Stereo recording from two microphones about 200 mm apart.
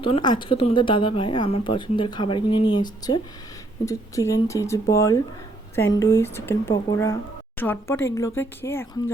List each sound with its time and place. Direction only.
0.0 s a woman's voice: 25° left (ahead or behind)